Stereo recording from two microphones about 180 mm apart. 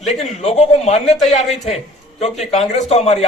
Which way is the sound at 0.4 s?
40° left (ahead or behind).